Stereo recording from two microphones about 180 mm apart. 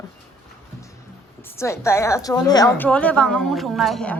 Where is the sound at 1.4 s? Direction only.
15° left (ahead or behind).